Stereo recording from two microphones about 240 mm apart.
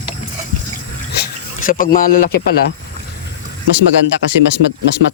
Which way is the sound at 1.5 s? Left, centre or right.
Left.